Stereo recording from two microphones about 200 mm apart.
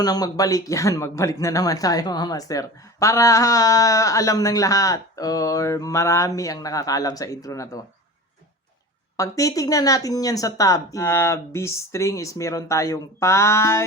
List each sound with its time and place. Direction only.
0.0 s speech: 20° left (ahead or behind)
9.1 s speech: 15° left (ahead or behind)